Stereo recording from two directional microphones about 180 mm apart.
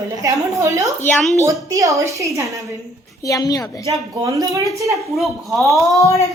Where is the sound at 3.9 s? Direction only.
20° right (ahead or behind).